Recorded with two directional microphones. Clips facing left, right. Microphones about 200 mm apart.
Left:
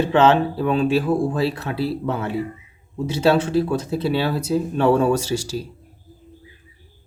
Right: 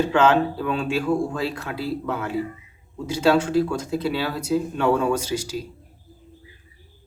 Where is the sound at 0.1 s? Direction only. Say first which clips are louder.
Left 2 dB; 25° left (ahead or behind).